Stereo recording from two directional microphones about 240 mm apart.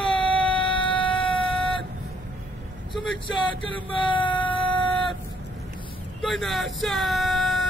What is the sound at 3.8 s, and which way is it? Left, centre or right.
Child singing, left.